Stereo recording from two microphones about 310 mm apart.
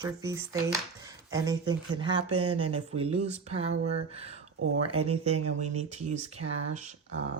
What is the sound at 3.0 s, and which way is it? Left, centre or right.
Speech, right.